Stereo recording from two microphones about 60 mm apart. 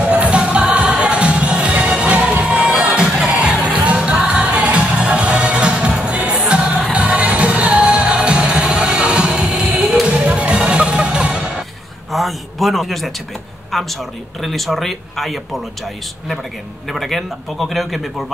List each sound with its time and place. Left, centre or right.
0.0 s music: centre
12.1 s a sound: centre
13.7 s speech: centre
16.9 s speech: centre